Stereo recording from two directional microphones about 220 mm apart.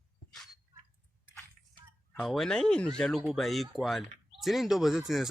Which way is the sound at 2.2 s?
Centre (ahead or behind).